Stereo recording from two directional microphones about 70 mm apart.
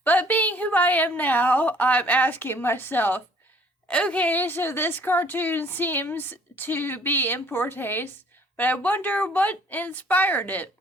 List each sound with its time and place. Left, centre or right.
0.0 s a woman's voice: left
3.8 s a woman's voice: centre